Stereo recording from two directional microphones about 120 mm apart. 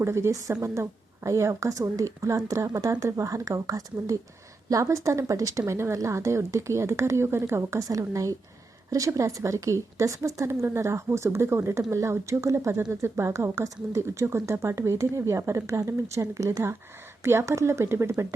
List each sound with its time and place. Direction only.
0.0 s speech: 25° right (ahead or behind)